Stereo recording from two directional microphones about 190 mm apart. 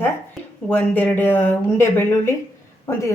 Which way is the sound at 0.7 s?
10° left (ahead or behind).